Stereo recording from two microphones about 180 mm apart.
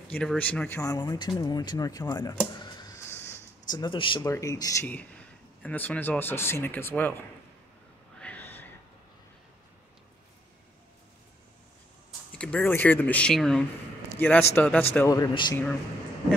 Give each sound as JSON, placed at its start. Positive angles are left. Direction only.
{"t": 0.1, "sound": "speech", "side_deg": 5}
{"t": 2.5, "sound": "a sound", "side_deg": 25}
{"t": 4.2, "sound": "speech", "side_deg": 15}
{"t": 8.2, "sound": "a sound", "side_deg": 10}
{"t": 12.3, "sound": "speech", "side_deg": 5}
{"t": 15.0, "sound": "speech", "side_deg": 20}